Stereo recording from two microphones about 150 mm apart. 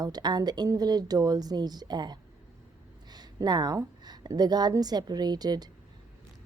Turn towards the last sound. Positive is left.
turn(degrees=-25)  # may be behind; listen again after turning